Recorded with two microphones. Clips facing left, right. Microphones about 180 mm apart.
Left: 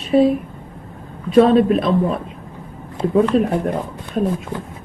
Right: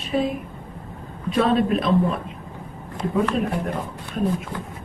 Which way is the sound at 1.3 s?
30° left (ahead or behind).